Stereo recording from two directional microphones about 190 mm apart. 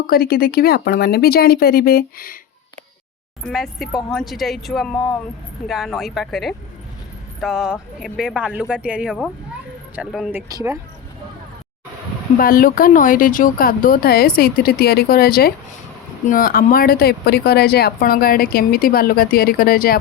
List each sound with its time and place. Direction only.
0.1 s speech: 50° left (ahead or behind)
3.4 s speech: centre (ahead or behind)
10.5 s speech: 20° right (ahead or behind)
12.4 s speech: 50° left (ahead or behind)